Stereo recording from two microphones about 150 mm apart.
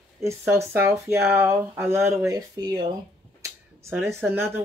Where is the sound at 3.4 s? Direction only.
20° right (ahead or behind).